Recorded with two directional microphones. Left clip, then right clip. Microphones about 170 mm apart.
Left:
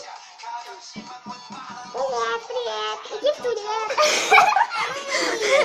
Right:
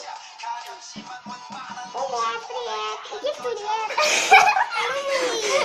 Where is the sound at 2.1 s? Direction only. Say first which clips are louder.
Left 1 dB; 5° left (ahead or behind).